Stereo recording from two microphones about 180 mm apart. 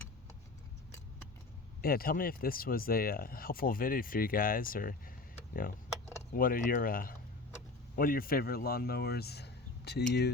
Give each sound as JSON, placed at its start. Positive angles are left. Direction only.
{"t": 1.8, "sound": "speech", "side_deg": 55}
{"t": 6.3, "sound": "speech", "side_deg": 50}